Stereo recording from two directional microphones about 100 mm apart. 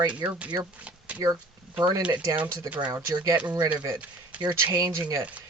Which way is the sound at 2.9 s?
35° right (ahead or behind).